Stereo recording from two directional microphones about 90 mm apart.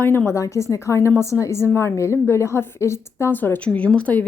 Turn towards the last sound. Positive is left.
turn(degrees=15)  # may be behind; listen again after turning